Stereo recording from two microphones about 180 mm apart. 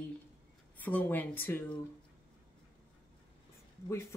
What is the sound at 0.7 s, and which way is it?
Speech, 10° left (ahead or behind).